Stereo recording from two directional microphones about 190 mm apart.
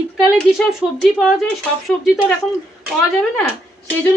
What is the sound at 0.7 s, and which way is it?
Speech, centre (ahead or behind).